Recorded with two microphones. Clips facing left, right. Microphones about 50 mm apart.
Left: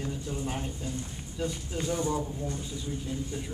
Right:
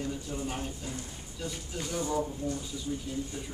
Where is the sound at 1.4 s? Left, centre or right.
Left.